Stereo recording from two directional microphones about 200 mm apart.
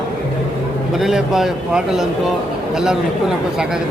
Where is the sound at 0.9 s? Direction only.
Centre (ahead or behind).